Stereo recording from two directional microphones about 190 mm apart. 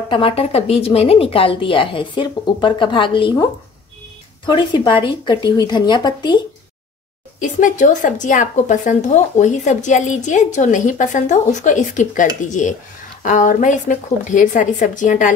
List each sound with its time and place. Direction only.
0.1 s a woman's voice: 30° left (ahead or behind)
4.5 s a woman's voice: 25° left (ahead or behind)
7.3 s speech: 40° left (ahead or behind)